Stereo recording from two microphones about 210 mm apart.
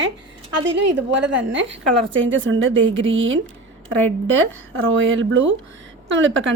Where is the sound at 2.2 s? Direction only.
65° right (ahead or behind).